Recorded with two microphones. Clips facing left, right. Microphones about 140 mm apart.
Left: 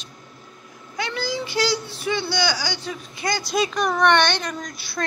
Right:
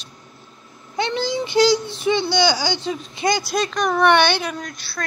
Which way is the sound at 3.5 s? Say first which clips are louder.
Right 1 dB; 5° left (ahead or behind).